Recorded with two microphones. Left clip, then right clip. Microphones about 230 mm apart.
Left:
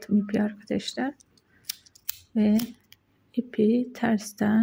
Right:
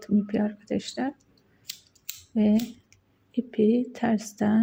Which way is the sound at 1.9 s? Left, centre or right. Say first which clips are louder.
Left 2 dB; left.